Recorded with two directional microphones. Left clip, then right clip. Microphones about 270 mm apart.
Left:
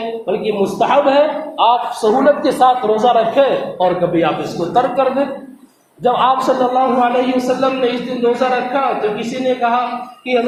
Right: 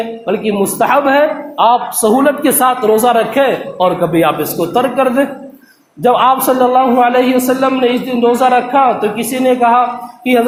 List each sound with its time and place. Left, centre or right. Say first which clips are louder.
0.4 s speech: right 2 dB; right